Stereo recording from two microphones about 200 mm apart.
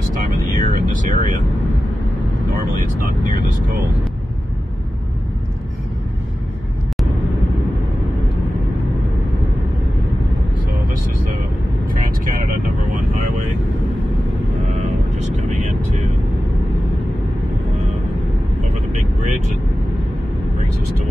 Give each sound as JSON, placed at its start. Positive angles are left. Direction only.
{"t": 0.1, "sound": "speech", "side_deg": -40}